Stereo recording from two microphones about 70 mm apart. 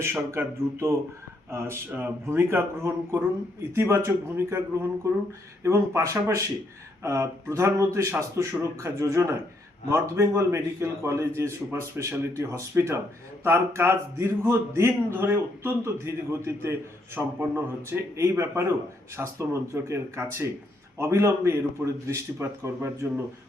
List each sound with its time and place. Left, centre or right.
0.3 s speech: right
1.9 s speech: right
17.2 s speech: right